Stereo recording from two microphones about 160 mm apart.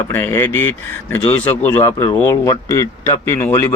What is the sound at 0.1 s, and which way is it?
A man's voice, 15° left (ahead or behind).